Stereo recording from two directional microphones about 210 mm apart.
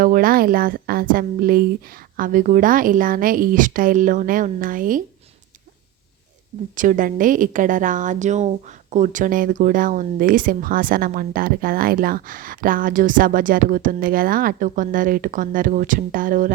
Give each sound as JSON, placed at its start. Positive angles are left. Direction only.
{"t": 0.0, "sound": "a woman's voice", "side_deg": -40}
{"t": 6.7, "sound": "a woman's voice", "side_deg": -40}